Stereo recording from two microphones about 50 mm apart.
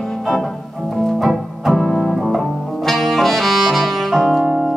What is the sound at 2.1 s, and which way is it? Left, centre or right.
Music, centre.